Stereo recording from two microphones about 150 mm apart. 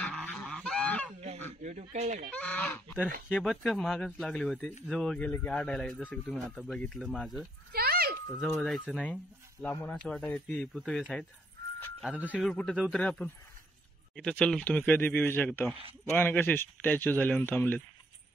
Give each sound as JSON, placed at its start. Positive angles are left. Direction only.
{"t": 0.0, "sound": "goose", "side_deg": 5}
{"t": 1.6, "sound": "speech", "side_deg": -50}
{"t": 2.3, "sound": "speech", "side_deg": 10}
{"t": 7.7, "sound": "a sound", "side_deg": -90}
{"t": 8.5, "sound": "speech", "side_deg": 5}
{"t": 12.0, "sound": "speech", "side_deg": -10}
{"t": 12.3, "sound": "speech", "side_deg": 5}